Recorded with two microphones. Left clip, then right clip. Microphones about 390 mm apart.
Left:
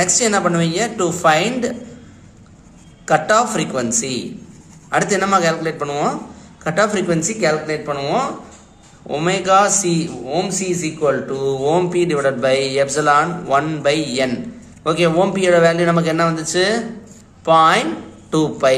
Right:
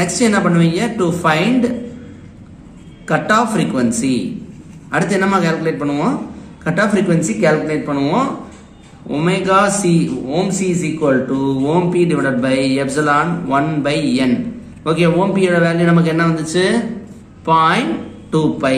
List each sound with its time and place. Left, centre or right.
0.0 s a man's voice: left
3.1 s a man's voice: left